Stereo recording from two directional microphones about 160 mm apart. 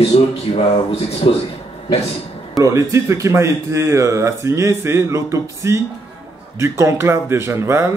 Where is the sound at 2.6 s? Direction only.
20° right (ahead or behind).